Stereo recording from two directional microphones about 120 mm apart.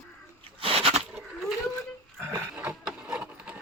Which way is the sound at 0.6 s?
55° right (ahead or behind).